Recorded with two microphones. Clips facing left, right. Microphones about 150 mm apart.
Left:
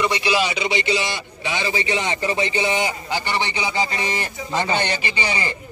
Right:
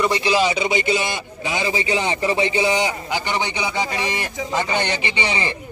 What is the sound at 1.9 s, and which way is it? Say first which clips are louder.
A man's voice: right 2 dB; 30° right (ahead or behind).